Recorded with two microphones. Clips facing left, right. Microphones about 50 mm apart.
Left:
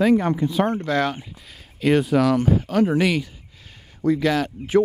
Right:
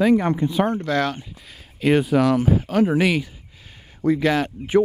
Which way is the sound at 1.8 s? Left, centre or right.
Centre.